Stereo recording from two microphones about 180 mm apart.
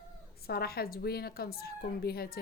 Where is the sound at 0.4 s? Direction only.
60° left (ahead or behind).